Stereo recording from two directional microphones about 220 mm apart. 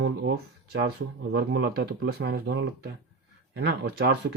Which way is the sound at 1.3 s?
50° right (ahead or behind).